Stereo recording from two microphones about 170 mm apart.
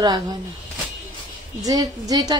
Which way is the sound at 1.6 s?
20° right (ahead or behind).